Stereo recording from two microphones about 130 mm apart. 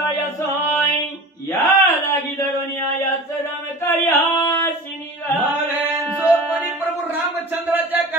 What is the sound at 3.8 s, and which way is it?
Singing, 15° left (ahead or behind).